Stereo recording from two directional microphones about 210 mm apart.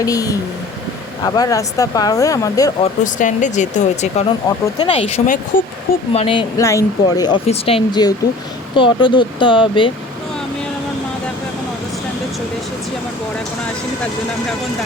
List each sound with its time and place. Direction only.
0.0 s speech: 15° left (ahead or behind)
2.8 s speech: 35° left (ahead or behind)
4.4 s speech: 20° left (ahead or behind); by 5.6 s 40° left (ahead or behind)
6.1 s speech: 25° left (ahead or behind)
6.6 s speech: 15° left (ahead or behind)
7.4 s speech: 30° left (ahead or behind)